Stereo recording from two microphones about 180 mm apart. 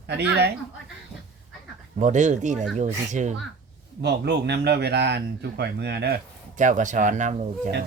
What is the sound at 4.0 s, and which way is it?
Speech, 70° right (ahead or behind).